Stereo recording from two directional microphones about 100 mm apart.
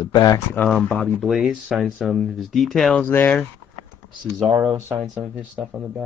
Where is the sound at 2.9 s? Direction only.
20° left (ahead or behind).